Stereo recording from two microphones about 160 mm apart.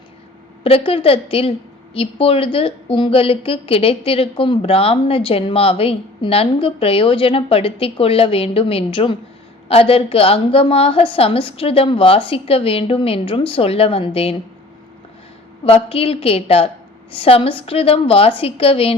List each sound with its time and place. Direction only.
0.6 s a woman's voice: 35° left (ahead or behind)
15.6 s a woman's voice: 35° left (ahead or behind)